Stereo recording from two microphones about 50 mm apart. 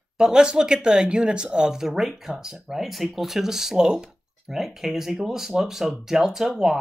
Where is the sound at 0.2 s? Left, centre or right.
Centre.